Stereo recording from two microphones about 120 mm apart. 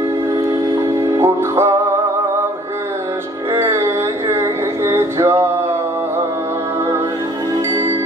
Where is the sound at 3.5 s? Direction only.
20° right (ahead or behind).